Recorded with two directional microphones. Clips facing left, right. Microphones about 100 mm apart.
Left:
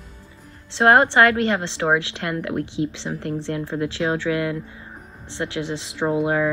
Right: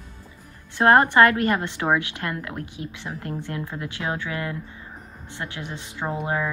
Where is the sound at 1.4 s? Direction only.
30° left (ahead or behind).